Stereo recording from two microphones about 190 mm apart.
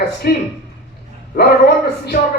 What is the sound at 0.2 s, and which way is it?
A man's voice, 55° left (ahead or behind).